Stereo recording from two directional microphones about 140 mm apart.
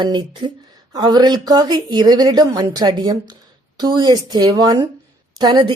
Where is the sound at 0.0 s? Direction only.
35° right (ahead or behind).